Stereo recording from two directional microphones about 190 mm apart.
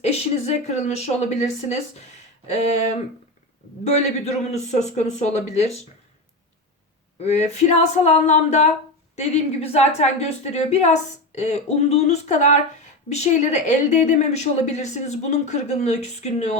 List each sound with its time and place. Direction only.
0.0 s a woman's voice: 35° left (ahead or behind)
7.2 s a woman's voice: 35° left (ahead or behind)